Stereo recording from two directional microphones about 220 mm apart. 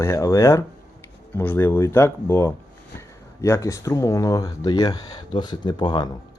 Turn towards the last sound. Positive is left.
turn(degrees=20)  # may be behind; listen again after turning